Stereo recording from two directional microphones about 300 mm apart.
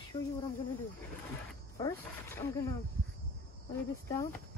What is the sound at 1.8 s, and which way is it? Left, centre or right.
Speech, centre.